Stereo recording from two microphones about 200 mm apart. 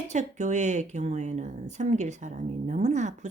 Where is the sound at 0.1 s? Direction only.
35° right (ahead or behind).